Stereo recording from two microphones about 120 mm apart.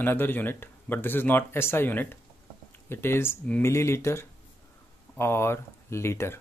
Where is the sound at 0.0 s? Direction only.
15° left (ahead or behind).